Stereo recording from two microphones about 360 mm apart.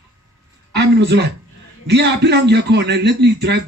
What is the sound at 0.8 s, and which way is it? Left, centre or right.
A man's voice, right.